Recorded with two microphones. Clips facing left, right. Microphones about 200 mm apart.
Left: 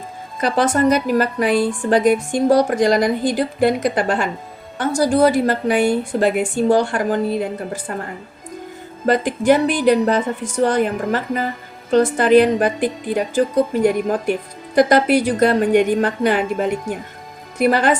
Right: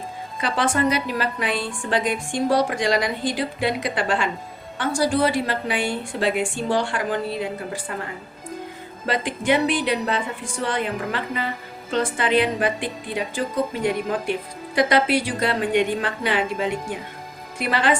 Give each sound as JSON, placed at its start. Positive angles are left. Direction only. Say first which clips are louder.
{"t": 0.3, "sound": "a woman's voice", "louder": "left 6 dB", "side_deg": 45}
{"t": 9.0, "sound": "a woman's voice", "louder": "left 7 dB", "side_deg": 40}